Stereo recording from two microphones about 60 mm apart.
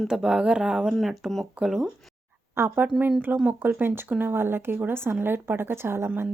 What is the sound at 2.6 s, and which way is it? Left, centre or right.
A woman's voice, right.